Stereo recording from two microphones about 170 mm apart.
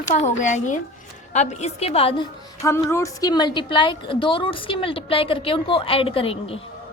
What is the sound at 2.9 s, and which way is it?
A woman's voice, 20° left (ahead or behind).